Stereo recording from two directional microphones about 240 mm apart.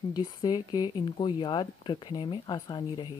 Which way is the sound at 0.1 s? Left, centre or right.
Centre.